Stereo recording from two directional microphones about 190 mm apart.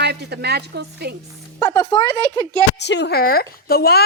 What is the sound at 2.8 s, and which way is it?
A woman's voice, 65° left (ahead or behind).